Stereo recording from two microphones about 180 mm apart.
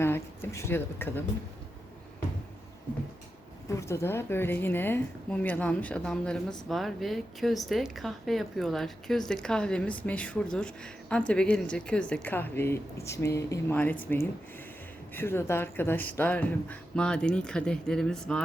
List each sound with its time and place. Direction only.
0.0 s speech: 15° left (ahead or behind)
3.7 s a woman's voice: 15° left (ahead or behind)
15.1 s speech: 15° left (ahead or behind)